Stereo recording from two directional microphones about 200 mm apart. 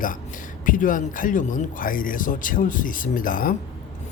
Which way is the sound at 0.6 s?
40° left (ahead or behind).